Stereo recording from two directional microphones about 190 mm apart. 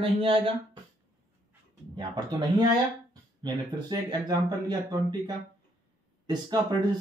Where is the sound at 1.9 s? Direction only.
20° right (ahead or behind).